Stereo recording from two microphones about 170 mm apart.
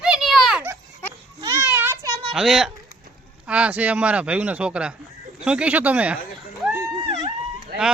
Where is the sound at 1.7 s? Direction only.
15° right (ahead or behind).